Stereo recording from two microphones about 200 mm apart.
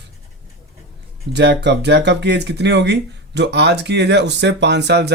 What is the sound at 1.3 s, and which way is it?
Speech, 55° right (ahead or behind).